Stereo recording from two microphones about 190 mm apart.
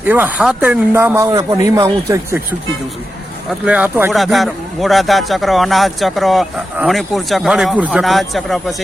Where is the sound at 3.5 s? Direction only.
5° right (ahead or behind).